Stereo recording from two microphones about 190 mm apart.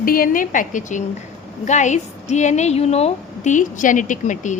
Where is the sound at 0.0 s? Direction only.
50° left (ahead or behind).